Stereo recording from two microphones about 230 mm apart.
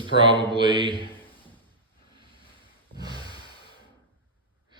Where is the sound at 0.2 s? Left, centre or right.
Right.